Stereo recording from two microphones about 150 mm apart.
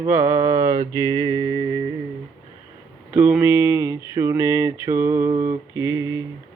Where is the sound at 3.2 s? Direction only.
10° right (ahead or behind).